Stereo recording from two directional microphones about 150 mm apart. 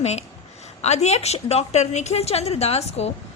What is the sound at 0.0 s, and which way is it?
A woman's voice, 45° left (ahead or behind).